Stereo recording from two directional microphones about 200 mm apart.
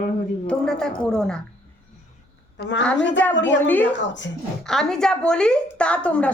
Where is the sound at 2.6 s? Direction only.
65° left (ahead or behind).